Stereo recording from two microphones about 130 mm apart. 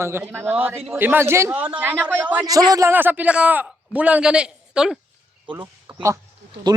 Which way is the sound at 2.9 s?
15° right (ahead or behind).